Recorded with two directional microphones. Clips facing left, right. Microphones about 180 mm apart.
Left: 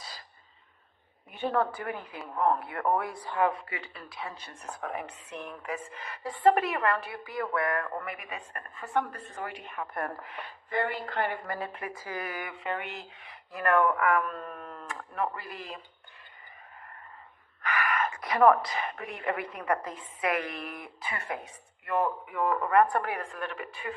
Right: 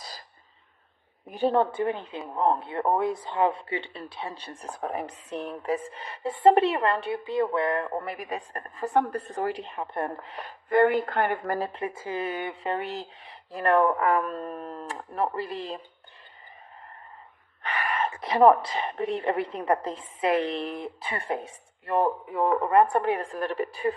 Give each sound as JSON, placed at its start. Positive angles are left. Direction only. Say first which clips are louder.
{"t": 1.3, "sound": "speech", "louder": "right 5 dB", "side_deg": -35}
{"t": 10.7, "sound": "speech", "louder": "right 10 dB", "side_deg": -50}
{"t": 11.7, "sound": "speech", "louder": "right 6 dB", "side_deg": -25}
{"t": 17.6, "sound": "speech", "louder": "right 1 dB", "side_deg": -30}